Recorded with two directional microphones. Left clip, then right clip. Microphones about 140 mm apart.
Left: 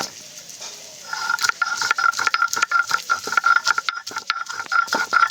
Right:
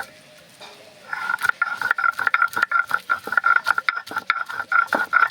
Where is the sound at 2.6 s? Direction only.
15° left (ahead or behind).